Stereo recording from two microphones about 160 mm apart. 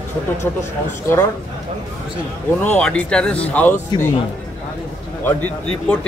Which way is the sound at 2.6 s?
5° left (ahead or behind).